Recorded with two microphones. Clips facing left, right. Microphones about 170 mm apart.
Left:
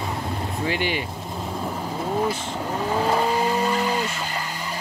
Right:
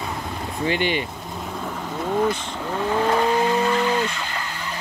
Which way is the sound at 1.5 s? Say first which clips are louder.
Left 1 dB; 10° left (ahead or behind).